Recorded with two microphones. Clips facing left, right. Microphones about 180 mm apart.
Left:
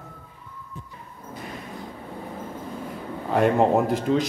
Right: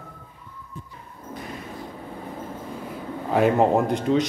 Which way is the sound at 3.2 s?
Centre (ahead or behind).